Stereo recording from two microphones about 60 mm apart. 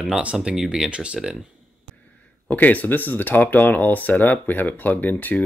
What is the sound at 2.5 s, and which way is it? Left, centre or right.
Speech, left.